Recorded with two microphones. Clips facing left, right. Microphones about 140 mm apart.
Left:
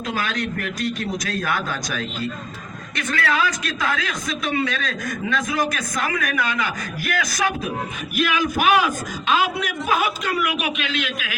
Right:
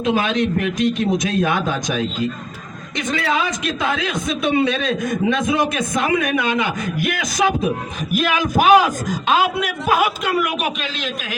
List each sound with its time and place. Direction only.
0.0 s a man's voice: 25° right (ahead or behind)
3.1 s a man's voice: 20° right (ahead or behind)
8.1 s a man's voice: 45° right (ahead or behind)